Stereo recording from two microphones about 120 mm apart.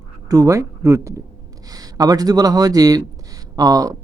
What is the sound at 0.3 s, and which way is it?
Speech, 30° right (ahead or behind).